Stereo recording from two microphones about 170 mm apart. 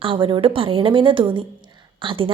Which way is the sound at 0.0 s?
30° right (ahead or behind).